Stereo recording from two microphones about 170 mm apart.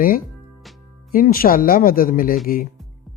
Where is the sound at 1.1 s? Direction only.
60° left (ahead or behind).